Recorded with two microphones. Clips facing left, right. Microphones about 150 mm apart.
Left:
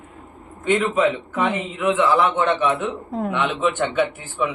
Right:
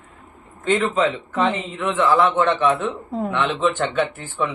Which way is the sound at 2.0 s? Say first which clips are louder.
Right 3 dB; 20° left (ahead or behind).